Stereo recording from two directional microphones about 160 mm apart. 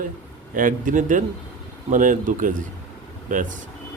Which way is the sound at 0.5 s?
55° right (ahead or behind).